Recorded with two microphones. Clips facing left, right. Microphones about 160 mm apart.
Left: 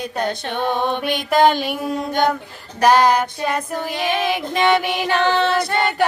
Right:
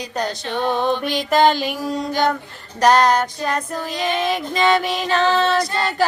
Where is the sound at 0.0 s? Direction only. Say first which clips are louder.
Left 2 dB; 55° left (ahead or behind).